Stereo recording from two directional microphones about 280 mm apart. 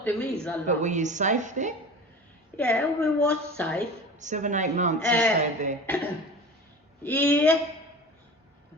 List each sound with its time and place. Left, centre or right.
0.0 s a woman's voice: centre
0.7 s a woman's voice: right
2.6 s a woman's voice: centre
4.2 s a woman's voice: right
5.0 s a woman's voice: centre
5.4 s a woman's voice: right
5.8 s speech: centre